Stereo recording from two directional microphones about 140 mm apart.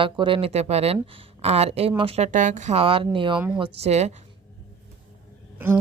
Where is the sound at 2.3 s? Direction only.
65° right (ahead or behind); by 3.4 s 35° right (ahead or behind).